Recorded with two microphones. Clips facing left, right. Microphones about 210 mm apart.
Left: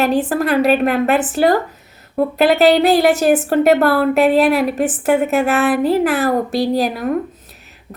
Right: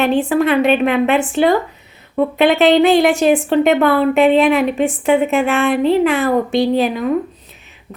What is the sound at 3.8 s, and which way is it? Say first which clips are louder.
Speech: right 1 dB; 5° left (ahead or behind).